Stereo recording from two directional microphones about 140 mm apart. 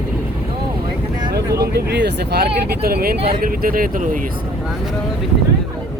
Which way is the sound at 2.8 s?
90° right.